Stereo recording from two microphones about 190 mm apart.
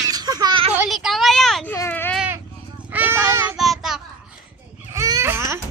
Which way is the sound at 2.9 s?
10° right (ahead or behind).